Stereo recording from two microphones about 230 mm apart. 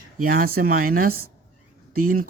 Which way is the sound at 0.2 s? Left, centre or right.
Right.